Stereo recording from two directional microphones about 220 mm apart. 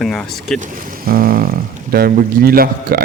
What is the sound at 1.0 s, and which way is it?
A man's voice, 40° right (ahead or behind).